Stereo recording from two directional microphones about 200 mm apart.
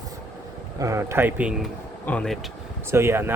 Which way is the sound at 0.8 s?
15° right (ahead or behind).